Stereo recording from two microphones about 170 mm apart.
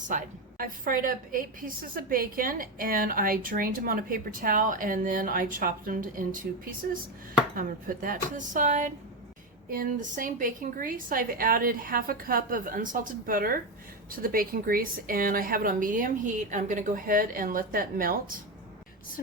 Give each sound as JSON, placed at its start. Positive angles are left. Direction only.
{"t": 0.1, "sound": "a woman's voice", "side_deg": -55}
{"t": 7.5, "sound": "a woman's voice", "side_deg": -55}